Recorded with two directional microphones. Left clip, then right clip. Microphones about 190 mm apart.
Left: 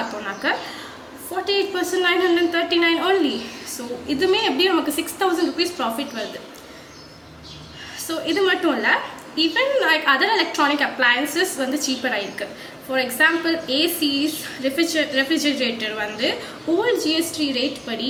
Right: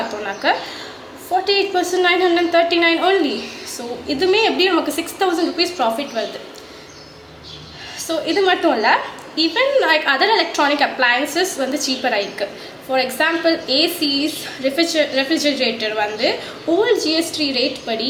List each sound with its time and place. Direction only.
0.4 s a woman's voice: 15° left (ahead or behind)
7.9 s a woman's voice: 20° left (ahead or behind)